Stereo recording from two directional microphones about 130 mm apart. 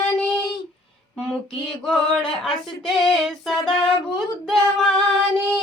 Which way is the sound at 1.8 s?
5° left (ahead or behind).